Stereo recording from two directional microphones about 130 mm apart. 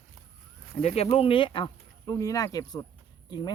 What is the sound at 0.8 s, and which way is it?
Speech, 55° left (ahead or behind).